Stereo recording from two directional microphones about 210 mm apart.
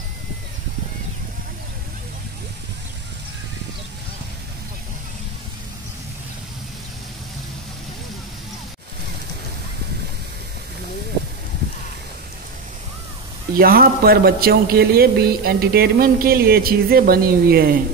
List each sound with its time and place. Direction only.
13.6 s a man's voice: 45° right (ahead or behind)